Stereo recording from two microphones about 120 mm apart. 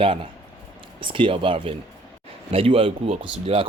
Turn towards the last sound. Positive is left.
turn(degrees=-55)  # may be behind; listen again after turning